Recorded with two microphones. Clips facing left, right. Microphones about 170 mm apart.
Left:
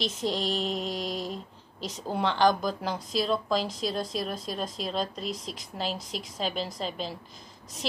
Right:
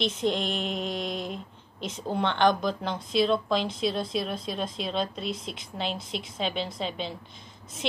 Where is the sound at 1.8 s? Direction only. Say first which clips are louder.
Right 1 dB; 40° left (ahead or behind).